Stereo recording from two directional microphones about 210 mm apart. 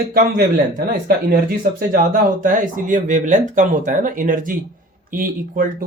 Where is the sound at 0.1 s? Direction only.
45° right (ahead or behind).